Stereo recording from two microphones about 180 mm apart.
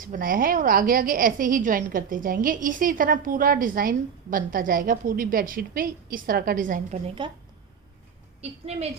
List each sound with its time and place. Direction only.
0.0 s a woman's voice: 50° right (ahead or behind)
7.2 s a woman's voice: 25° right (ahead or behind)
8.4 s a woman's voice: 35° right (ahead or behind)